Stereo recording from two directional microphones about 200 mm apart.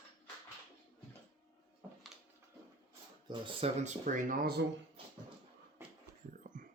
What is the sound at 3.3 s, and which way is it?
Speech, 30° right (ahead or behind).